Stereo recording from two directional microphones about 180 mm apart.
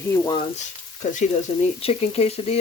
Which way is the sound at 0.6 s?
40° left (ahead or behind).